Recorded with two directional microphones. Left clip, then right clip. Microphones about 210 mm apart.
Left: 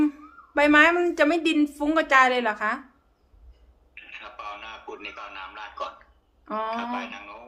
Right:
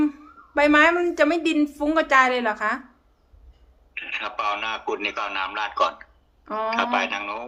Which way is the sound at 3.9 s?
55° right (ahead or behind).